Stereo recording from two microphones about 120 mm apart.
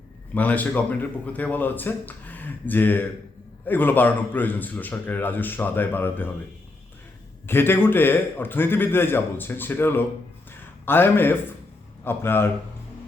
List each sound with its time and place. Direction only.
0.3 s speech: 15° left (ahead or behind)
7.4 s speech: 20° left (ahead or behind)
10.5 s a sound: 20° left (ahead or behind)
12.0 s a man's voice: 20° left (ahead or behind)